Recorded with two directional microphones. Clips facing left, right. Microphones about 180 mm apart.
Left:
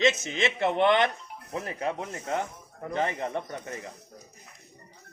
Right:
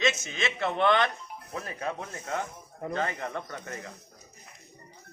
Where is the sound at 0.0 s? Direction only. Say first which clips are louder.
Left 4 dB; 20° left (ahead or behind).